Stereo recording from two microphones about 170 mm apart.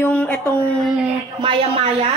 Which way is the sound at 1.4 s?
30° right (ahead or behind).